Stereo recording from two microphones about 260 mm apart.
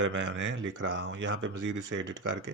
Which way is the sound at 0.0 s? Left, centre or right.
Right.